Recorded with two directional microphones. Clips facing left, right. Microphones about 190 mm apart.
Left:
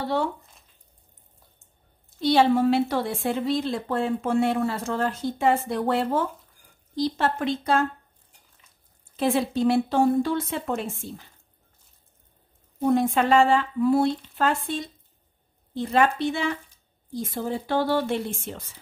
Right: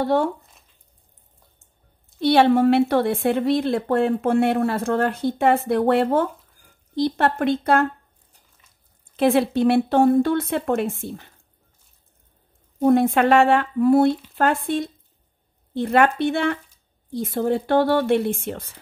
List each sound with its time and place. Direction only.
0.0 s speech: 50° right (ahead or behind)
2.1 s speech: 65° right (ahead or behind)
9.1 s speech: 65° right (ahead or behind)
12.8 s speech: 60° right (ahead or behind)